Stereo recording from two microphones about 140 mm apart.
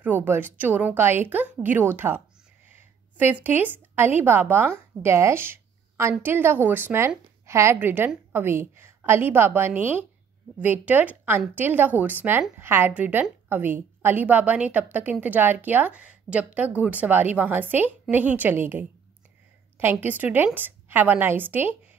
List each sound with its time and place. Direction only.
0.0 s speech: 15° right (ahead or behind)